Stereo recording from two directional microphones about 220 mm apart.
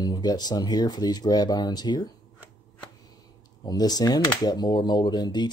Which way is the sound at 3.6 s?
15° left (ahead or behind).